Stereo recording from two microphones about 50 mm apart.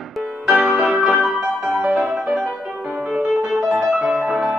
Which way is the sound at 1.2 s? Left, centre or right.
Centre.